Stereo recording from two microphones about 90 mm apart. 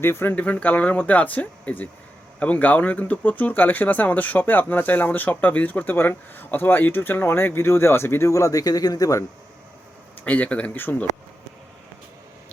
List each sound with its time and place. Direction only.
0.0 s speech: 25° left (ahead or behind)
10.2 s speech: 15° left (ahead or behind)